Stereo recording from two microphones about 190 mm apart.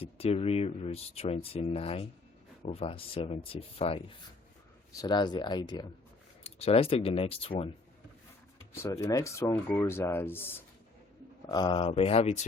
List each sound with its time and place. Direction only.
0.0 s speech: 30° left (ahead or behind)
8.7 s speech: 15° left (ahead or behind)
11.4 s speech: 20° left (ahead or behind)